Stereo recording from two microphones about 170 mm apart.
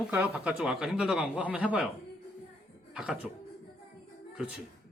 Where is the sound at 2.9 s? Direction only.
5° right (ahead or behind).